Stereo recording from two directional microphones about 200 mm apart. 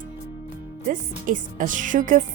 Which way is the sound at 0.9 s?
40° right (ahead or behind).